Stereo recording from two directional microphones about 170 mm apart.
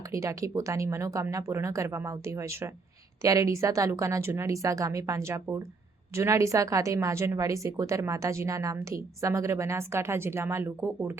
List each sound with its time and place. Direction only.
0.1 s a woman's voice: 20° right (ahead or behind)